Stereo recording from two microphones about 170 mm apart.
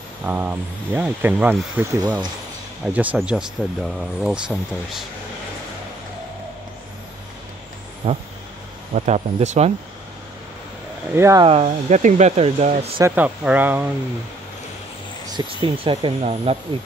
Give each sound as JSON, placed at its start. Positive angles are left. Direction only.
{"t": 0.2, "sound": "speech", "side_deg": -10}
{"t": 8.0, "sound": "speech", "side_deg": -40}
{"t": 11.1, "sound": "speech", "side_deg": -15}
{"t": 11.4, "sound": "speech", "side_deg": -35}
{"t": 13.0, "sound": "speech", "side_deg": -10}
{"t": 15.2, "sound": "speech", "side_deg": -30}